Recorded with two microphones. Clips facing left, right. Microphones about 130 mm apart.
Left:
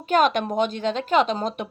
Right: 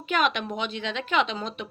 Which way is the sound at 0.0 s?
45° left (ahead or behind).